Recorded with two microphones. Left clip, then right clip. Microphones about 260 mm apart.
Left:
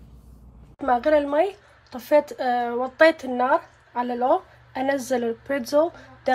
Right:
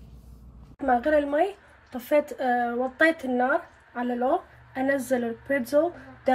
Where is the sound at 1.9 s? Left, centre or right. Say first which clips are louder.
Left 4 dB; left.